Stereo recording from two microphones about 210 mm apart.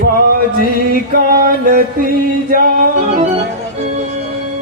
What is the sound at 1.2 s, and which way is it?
Music, 45° right (ahead or behind).